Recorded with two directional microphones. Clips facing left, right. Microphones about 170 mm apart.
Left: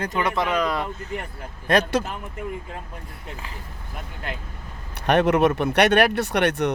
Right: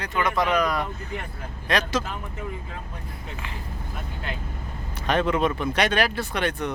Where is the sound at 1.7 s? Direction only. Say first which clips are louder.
Left 5 dB; 55° left (ahead or behind).